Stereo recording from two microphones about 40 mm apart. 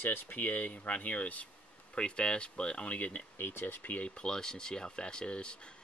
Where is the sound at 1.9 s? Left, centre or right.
Left.